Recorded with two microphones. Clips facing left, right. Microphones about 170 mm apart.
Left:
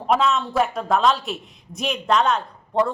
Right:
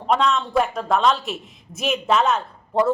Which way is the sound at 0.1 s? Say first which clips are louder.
Even; 5° left (ahead or behind).